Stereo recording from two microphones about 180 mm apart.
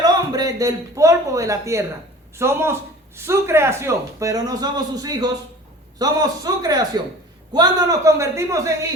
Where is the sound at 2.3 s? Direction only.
15° right (ahead or behind).